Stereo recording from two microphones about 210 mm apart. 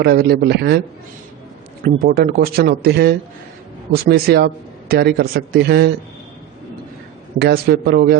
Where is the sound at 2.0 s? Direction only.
50° right (ahead or behind).